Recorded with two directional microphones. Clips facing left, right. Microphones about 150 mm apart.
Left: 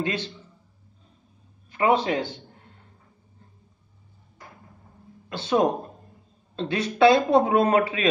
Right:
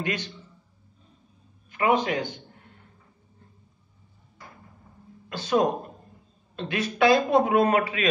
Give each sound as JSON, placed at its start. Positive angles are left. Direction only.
{"t": 0.0, "sound": "a man's voice", "side_deg": 30}
{"t": 1.7, "sound": "a man's voice", "side_deg": 30}
{"t": 5.3, "sound": "a man's voice", "side_deg": 25}